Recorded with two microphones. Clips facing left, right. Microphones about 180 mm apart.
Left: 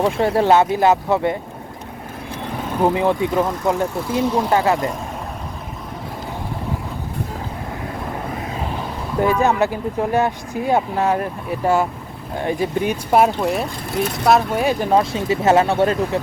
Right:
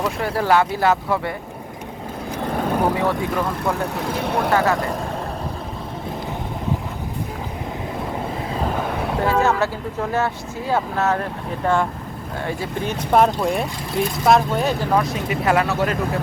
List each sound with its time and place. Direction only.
0.0 s speech: 25° left (ahead or behind)
2.9 s speech: 20° left (ahead or behind)
3.9 s speech: 70° right (ahead or behind)
4.5 s speech: 20° left (ahead or behind)
8.7 s vehicle: 65° right (ahead or behind)
9.4 s speech: 15° left (ahead or behind)
14.8 s speech: 30° left (ahead or behind)